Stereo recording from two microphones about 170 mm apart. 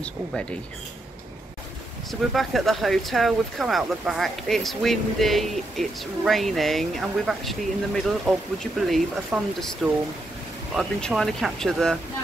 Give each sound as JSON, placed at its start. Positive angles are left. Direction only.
{"t": 0.0, "sound": "speech", "side_deg": 5}
{"t": 2.0, "sound": "speech", "side_deg": 0}
{"t": 10.7, "sound": "speech", "side_deg": 0}